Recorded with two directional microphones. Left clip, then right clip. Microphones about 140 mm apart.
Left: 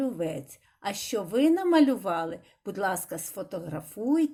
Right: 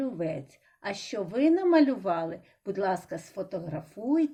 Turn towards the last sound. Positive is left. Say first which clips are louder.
# left 1 dB
turn(degrees=40)  # may be behind; listen again after turning